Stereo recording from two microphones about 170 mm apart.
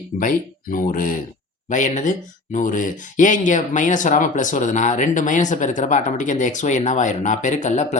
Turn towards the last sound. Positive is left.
turn(degrees=45)  # may be behind; listen again after turning